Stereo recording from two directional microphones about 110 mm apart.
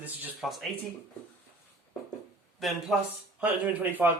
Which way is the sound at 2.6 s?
Centre (ahead or behind).